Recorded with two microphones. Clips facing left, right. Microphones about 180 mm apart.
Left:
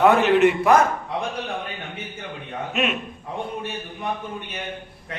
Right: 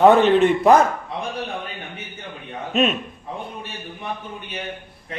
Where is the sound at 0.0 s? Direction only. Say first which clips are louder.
Right 2 dB; 30° right (ahead or behind).